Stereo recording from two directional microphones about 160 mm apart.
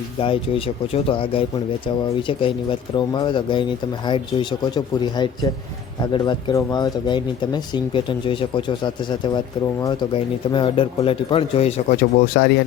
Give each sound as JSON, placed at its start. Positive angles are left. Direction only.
{"t": 1.0, "sound": "a man's voice", "side_deg": 35}
{"t": 3.1, "sound": "speech", "side_deg": 25}
{"t": 10.5, "sound": "a man's voice", "side_deg": 35}
{"t": 11.9, "sound": "speech", "side_deg": 65}